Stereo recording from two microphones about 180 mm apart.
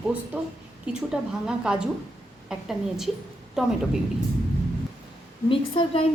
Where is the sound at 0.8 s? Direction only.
5° right (ahead or behind).